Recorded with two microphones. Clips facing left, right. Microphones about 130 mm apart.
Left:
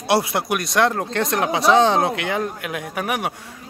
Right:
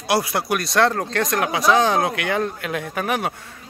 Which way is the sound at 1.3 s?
25° left (ahead or behind).